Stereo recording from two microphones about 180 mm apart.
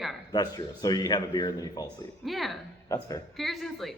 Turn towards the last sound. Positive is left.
turn(degrees=0)  # may be behind; listen again after turning